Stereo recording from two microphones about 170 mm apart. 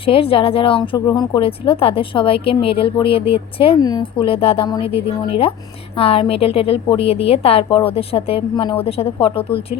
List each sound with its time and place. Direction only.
0.0 s speech: 35° left (ahead or behind)
0.9 s speech: 20° left (ahead or behind)